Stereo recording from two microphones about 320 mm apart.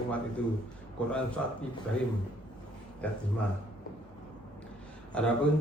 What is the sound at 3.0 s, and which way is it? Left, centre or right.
Speech, centre.